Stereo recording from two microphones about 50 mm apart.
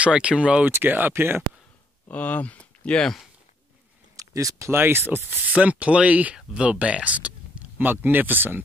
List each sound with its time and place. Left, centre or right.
0.0 s speech: right
0.8 s speech: right
2.0 s speech: left
3.0 s speech: centre
4.2 s speech: right
4.7 s speech: right
5.6 s speech: right
7.9 s speech: right